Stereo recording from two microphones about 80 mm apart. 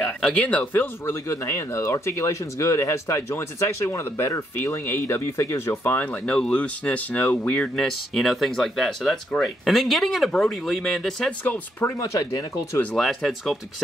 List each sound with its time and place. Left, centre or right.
0.0 s speech: centre; by 5.9 s left
5.9 s speech: centre
7.8 s speech: centre
11.4 s speech: left
12.2 s speech: left
12.9 s speech: centre